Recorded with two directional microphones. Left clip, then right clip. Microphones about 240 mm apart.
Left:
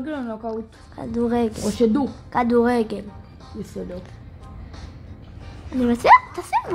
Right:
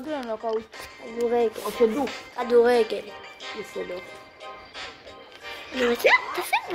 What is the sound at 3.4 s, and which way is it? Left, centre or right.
Music, right.